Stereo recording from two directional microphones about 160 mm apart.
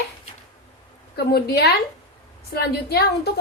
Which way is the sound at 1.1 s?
80° left.